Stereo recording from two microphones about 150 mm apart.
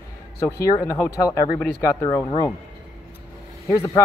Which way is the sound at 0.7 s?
20° left (ahead or behind).